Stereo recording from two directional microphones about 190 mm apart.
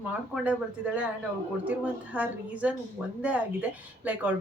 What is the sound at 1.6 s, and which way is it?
A woman's voice, 5° right (ahead or behind).